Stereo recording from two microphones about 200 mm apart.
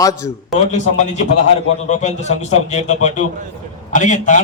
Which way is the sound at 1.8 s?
35° left (ahead or behind).